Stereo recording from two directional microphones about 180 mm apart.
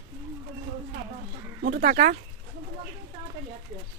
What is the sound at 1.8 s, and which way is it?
Speech, 50° right (ahead or behind).